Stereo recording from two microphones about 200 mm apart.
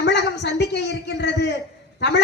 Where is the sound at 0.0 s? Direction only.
60° left (ahead or behind).